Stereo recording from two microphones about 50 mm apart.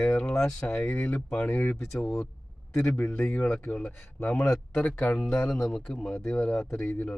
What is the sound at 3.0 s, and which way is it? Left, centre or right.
Speech, left.